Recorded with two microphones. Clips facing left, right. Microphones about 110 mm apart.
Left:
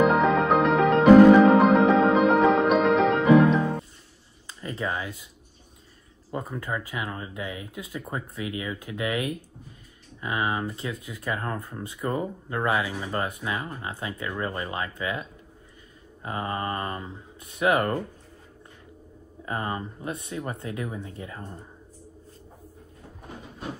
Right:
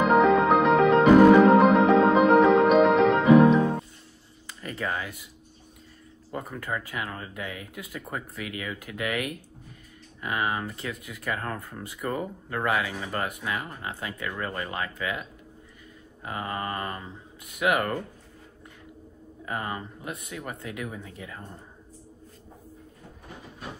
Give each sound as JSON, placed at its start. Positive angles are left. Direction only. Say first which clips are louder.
{"t": 0.0, "sound": "music", "louder": "right 1 dB", "side_deg": 0}
{"t": 4.6, "sound": "a sound", "louder": "left 1 dB", "side_deg": 25}
{"t": 6.3, "sound": "speech", "louder": "left 1 dB", "side_deg": 20}
{"t": 19.4, "sound": "speech", "louder": "left 2 dB", "side_deg": 30}